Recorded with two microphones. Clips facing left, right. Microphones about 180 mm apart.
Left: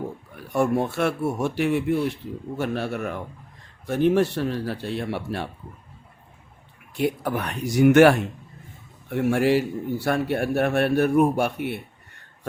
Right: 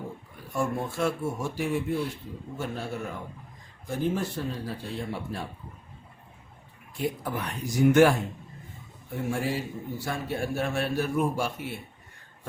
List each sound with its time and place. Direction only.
0.3 s speech: 70° left (ahead or behind)
6.9 s speech: 70° left (ahead or behind)